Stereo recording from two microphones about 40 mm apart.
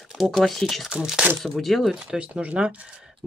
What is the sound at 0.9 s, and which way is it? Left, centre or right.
Speech, right.